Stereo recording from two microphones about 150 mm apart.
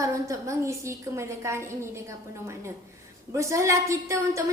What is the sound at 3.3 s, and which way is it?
A woman's voice, 20° right (ahead or behind).